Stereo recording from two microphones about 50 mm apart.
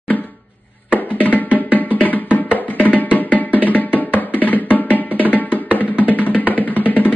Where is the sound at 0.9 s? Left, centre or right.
Left.